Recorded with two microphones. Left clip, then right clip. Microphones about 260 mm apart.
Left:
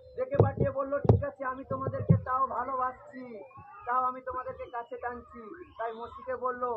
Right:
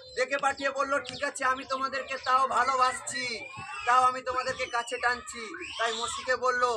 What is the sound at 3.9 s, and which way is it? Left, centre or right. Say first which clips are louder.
Speech: right 6 dB; right.